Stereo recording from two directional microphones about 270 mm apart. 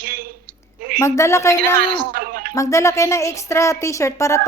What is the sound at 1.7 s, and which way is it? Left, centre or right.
Speech, right.